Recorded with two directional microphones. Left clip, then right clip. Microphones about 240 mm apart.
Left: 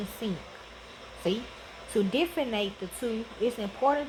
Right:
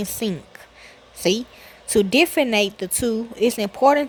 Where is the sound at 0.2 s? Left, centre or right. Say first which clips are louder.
Right 8 dB; right.